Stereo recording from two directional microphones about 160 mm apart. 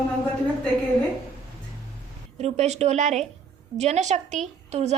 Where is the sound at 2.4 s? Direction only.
45° right (ahead or behind).